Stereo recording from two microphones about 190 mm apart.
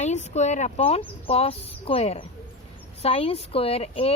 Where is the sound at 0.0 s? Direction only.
35° left (ahead or behind).